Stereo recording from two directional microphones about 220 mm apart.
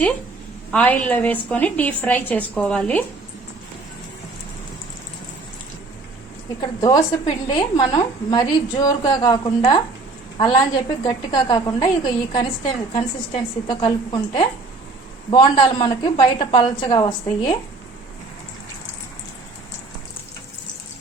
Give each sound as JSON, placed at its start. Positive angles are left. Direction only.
{"t": 0.7, "sound": "a woman's voice", "side_deg": 5}
{"t": 6.6, "sound": "a woman's voice", "side_deg": 15}